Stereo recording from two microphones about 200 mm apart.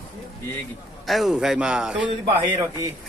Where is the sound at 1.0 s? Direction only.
Centre (ahead or behind).